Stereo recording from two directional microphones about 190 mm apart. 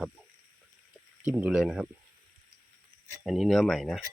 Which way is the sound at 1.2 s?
5° right (ahead or behind).